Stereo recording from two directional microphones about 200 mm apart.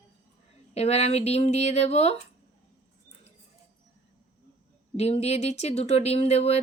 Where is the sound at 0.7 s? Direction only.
30° left (ahead or behind).